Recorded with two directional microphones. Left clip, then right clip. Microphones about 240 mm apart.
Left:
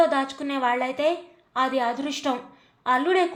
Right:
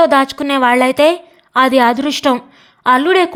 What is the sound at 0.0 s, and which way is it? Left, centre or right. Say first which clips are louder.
A woman's voice: right 11 dB; right.